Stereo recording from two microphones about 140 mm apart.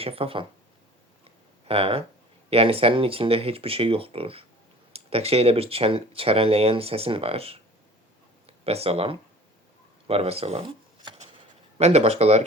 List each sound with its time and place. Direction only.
0.0 s speech: 45° right (ahead or behind)
1.2 s a sound: 45° right (ahead or behind)
2.5 s speech: 45° right (ahead or behind)
10.1 s shuffling cards: 45° right (ahead or behind)
11.8 s speech: 50° right (ahead or behind)